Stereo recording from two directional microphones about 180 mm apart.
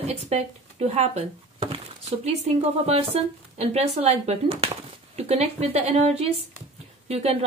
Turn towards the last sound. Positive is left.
turn(degrees=-35)  # may be behind; listen again after turning